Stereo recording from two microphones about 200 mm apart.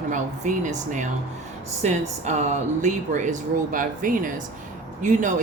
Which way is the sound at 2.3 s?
35° right (ahead or behind).